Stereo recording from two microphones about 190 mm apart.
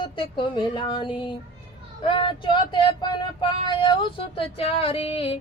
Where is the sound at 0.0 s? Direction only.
25° left (ahead or behind).